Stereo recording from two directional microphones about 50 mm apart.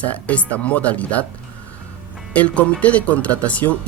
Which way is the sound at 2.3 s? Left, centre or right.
Left.